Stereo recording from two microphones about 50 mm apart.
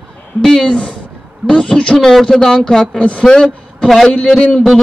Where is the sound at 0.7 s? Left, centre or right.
Left.